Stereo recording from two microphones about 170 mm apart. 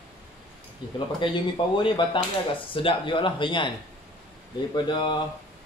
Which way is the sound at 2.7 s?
30° left (ahead or behind).